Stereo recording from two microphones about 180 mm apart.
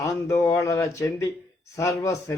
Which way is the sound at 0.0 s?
15° left (ahead or behind).